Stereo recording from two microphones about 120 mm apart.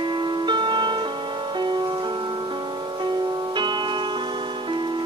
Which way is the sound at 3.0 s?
35° right (ahead or behind).